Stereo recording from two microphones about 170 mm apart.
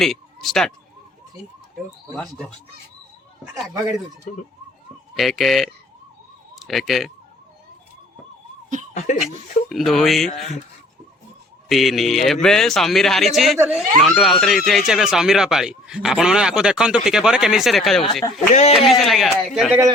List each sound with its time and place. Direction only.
0.0 s speech: centre (ahead or behind)
2.1 s speech: 5° left (ahead or behind)
5.1 s speech: centre (ahead or behind)
8.9 s speech: 45° left (ahead or behind)
9.6 s speech: centre (ahead or behind)
11.7 s speech: centre (ahead or behind)